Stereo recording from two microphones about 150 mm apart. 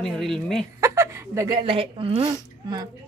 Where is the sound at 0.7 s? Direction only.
20° right (ahead or behind).